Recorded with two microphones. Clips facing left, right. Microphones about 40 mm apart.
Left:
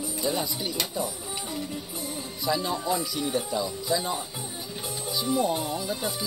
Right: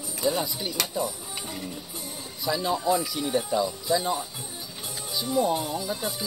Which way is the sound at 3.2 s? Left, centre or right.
Centre.